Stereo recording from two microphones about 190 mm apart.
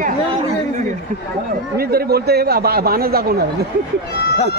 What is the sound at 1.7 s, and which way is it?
A man's voice, 55° right (ahead or behind).